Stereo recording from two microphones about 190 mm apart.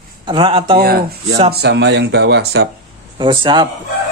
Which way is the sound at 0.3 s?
25° right (ahead or behind).